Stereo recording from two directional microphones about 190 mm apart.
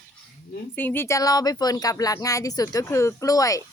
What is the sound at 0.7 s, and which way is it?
Speech, 10° left (ahead or behind).